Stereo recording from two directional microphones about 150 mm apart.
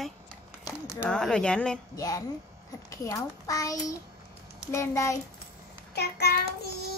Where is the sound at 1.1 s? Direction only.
5° left (ahead or behind).